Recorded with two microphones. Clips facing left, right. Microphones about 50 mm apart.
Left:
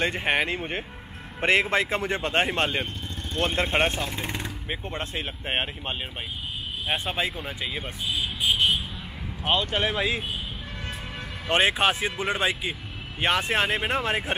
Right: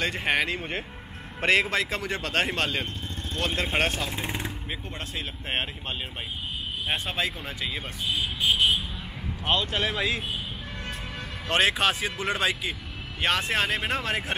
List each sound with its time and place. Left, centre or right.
0.2 s speech: centre
3.6 s speech: centre
4.1 s speech: centre
4.6 s speech: left; by 8.8 s centre
9.4 s speech: centre
11.4 s speech: left